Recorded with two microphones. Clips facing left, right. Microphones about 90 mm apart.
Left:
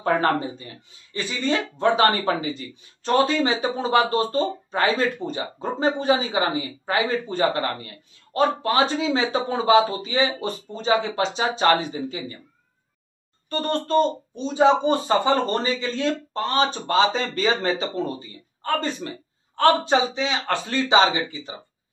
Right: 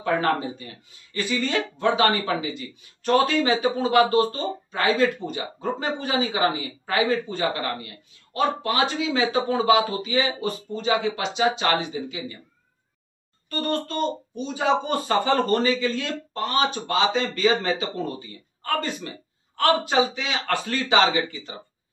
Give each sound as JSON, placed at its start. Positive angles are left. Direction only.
{"t": 0.0, "sound": "speech", "side_deg": 30}
{"t": 13.5, "sound": "speech", "side_deg": 35}